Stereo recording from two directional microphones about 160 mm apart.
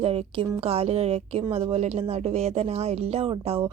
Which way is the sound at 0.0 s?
40° right (ahead or behind).